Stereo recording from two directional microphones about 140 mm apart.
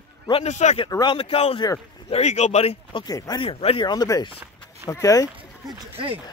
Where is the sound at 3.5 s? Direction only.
40° left (ahead or behind).